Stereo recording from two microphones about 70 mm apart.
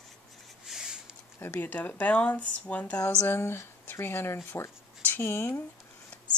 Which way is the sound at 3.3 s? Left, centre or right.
Left.